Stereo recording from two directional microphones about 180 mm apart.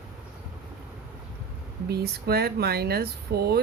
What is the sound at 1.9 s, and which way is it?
Speech, 60° right (ahead or behind).